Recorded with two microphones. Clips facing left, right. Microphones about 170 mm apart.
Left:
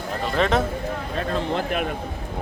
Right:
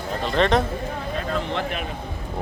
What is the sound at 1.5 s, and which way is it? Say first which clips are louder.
Speech: left 3 dB; 45° left (ahead or behind).